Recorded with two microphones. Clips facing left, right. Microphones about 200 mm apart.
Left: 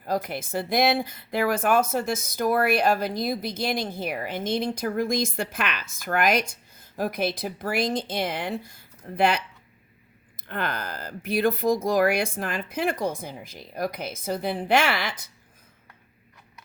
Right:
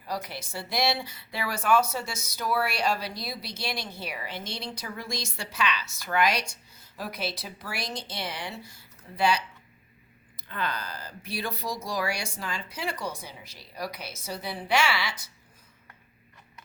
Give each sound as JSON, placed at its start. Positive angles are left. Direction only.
{"t": 0.0, "sound": "a woman's voice", "side_deg": 50}
{"t": 10.6, "sound": "a woman's voice", "side_deg": 50}